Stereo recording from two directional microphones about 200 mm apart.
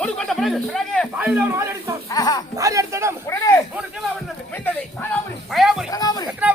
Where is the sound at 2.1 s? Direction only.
20° left (ahead or behind).